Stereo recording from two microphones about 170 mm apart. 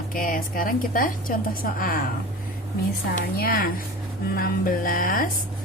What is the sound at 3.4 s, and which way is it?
A woman's voice, 60° left (ahead or behind).